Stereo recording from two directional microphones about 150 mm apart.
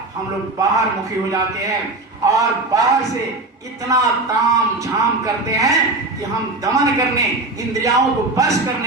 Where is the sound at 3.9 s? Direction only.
20° right (ahead or behind).